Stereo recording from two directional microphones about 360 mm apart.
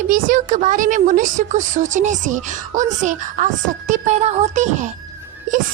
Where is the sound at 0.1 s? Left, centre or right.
Right.